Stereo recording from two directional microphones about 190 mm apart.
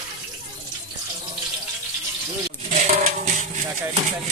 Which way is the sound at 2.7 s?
40° right (ahead or behind).